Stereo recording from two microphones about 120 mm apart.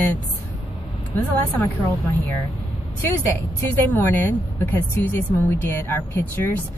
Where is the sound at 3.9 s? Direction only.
20° left (ahead or behind).